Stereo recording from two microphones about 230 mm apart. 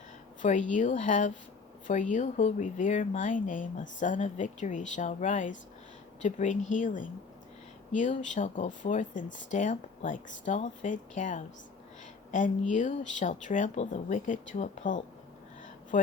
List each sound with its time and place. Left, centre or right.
0.4 s speech: left